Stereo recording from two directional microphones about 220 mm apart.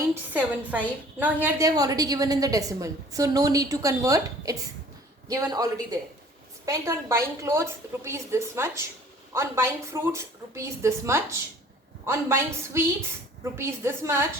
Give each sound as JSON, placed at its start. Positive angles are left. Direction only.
{"t": 0.1, "sound": "a woman's voice", "side_deg": -5}